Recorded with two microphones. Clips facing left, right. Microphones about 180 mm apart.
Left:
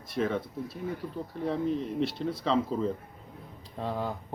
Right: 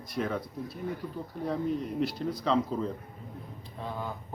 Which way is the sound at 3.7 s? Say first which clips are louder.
Left 5 dB; 35° left (ahead or behind).